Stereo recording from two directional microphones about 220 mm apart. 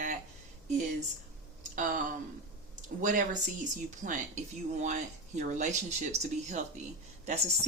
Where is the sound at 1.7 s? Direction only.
40° right (ahead or behind).